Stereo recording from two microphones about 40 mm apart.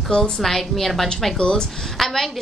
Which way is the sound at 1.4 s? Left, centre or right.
Centre.